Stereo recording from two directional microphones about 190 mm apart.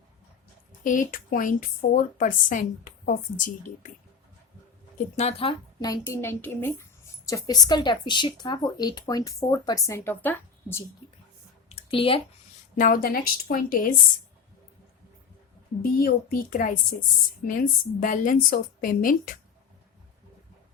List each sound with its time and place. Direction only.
0.9 s a woman's voice: 45° left (ahead or behind)
5.1 s speech: 30° left (ahead or behind)
5.8 s a woman's voice: 15° left (ahead or behind)
11.7 s a sound: 30° left (ahead or behind)
12.7 s a woman's voice: 45° left (ahead or behind)
15.8 s a woman's voice: 50° left (ahead or behind)